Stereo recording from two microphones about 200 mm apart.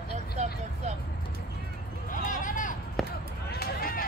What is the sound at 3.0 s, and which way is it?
Basketball bounce, centre (ahead or behind).